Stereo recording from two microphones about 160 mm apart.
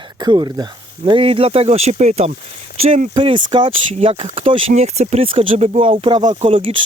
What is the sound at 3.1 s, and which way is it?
Speech, 30° right (ahead or behind).